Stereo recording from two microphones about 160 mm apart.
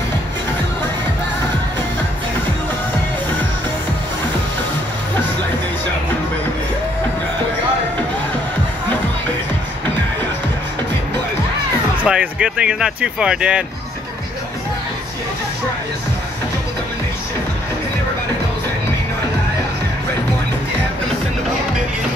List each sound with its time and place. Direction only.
12.0 s speech: 5° right (ahead or behind)